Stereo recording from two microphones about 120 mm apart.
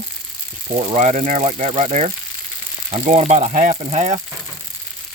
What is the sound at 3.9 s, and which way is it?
Speech, 75° right (ahead or behind).